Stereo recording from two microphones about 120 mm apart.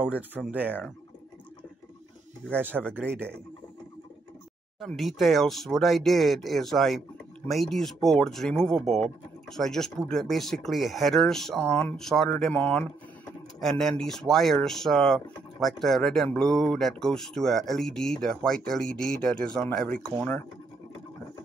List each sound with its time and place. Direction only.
0.5 s speech: 15° right (ahead or behind)
2.9 s speech: 15° right (ahead or behind)
4.7 s speech: centre (ahead or behind)